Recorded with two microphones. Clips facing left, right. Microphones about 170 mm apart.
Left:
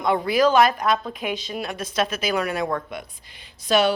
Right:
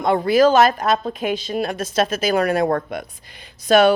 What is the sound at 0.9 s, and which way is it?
A woman's voice, 35° right (ahead or behind).